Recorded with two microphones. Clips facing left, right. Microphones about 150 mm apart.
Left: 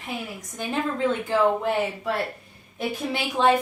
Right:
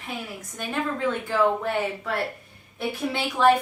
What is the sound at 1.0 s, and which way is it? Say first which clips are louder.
Speech: left 2 dB; 20° left (ahead or behind).